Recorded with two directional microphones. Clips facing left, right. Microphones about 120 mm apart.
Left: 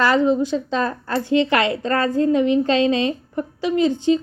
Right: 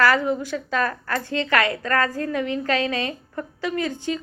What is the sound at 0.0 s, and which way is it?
A woman's voice, 20° left (ahead or behind).